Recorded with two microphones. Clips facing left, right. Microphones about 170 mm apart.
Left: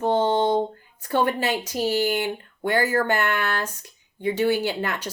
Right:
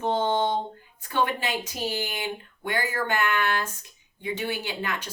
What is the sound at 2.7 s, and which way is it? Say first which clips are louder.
Speech: left 6 dB; 40° left (ahead or behind).